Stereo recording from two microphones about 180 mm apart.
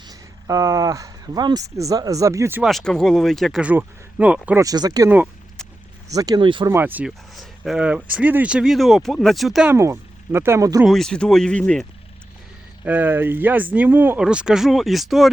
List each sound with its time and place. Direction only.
0.1 s speech: 20° right (ahead or behind)
2.6 s speech: centre (ahead or behind)
4.6 s speech: 20° right (ahead or behind)
5.1 s a sound: 5° right (ahead or behind)
6.1 s speech: 20° right (ahead or behind)
6.7 s speech: 10° right (ahead or behind)
9.7 s speech: 15° right (ahead or behind)
10.8 s speech: centre (ahead or behind)
12.8 s speech: 10° right (ahead or behind)